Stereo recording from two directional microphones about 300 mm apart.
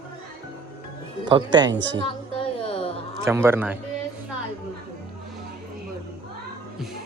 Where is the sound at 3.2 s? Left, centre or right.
Centre.